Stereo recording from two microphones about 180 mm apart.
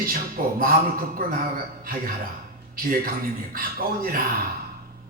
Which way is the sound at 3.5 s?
55° right (ahead or behind).